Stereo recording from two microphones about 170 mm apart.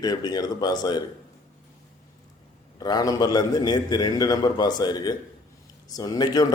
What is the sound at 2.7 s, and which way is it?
A man's voice, 25° left (ahead or behind).